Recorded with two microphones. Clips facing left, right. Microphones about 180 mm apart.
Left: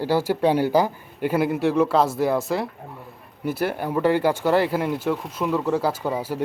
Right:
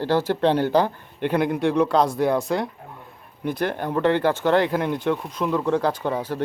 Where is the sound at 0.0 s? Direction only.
10° left (ahead or behind).